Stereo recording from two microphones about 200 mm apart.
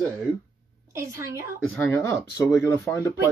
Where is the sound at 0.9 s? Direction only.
15° right (ahead or behind).